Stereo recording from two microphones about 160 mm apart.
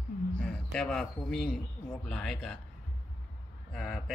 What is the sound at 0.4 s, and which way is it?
A man's voice, 5° left (ahead or behind).